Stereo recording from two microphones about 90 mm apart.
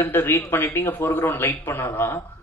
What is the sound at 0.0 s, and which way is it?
Speech, 25° left (ahead or behind).